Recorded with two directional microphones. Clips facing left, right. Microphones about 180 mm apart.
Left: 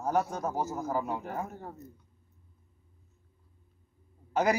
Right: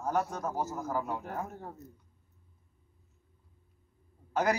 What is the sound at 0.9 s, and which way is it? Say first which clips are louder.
Speech: left 2 dB; 20° left (ahead or behind).